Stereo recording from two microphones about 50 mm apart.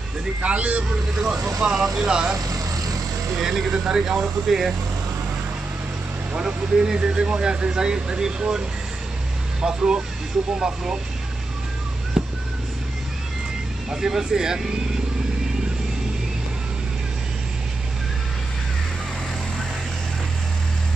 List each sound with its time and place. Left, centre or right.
0.4 s a man's voice: right
1.1 s speech: centre
3.3 s speech: centre
6.3 s a man's voice: centre
12.2 s a sound: centre
13.8 s speech: centre